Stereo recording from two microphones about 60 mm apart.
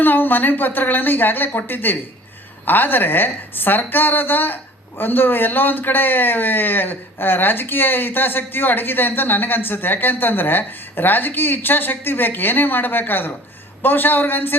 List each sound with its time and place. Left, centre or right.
0.0 s a woman's voice: left